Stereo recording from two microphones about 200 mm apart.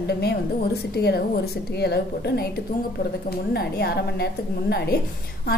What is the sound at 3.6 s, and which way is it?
A woman's voice, 50° left (ahead or behind).